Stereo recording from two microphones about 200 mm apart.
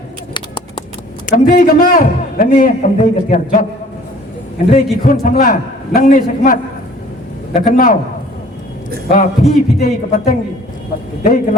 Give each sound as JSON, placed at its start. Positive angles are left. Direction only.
{"t": 1.3, "sound": "a man's voice", "side_deg": 45}
{"t": 4.7, "sound": "a man's voice", "side_deg": 40}
{"t": 9.1, "sound": "a man's voice", "side_deg": 45}